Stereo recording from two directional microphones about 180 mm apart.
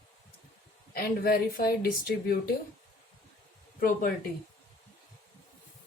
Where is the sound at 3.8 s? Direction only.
50° left (ahead or behind).